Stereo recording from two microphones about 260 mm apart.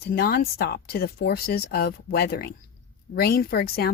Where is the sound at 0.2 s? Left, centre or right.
Left.